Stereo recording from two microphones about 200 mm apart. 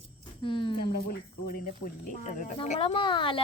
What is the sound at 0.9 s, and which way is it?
Speech, 45° left (ahead or behind).